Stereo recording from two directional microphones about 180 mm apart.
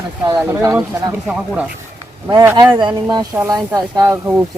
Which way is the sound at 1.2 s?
5° right (ahead or behind).